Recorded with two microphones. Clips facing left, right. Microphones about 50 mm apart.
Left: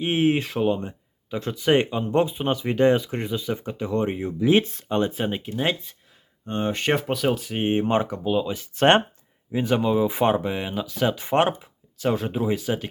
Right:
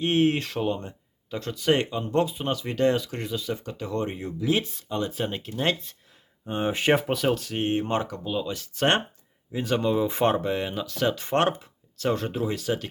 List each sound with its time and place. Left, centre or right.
0.0 s speech: centre; by 5.1 s left
5.1 s speech: centre
6.4 s speech: centre
8.7 s speech: left
9.5 s speech: centre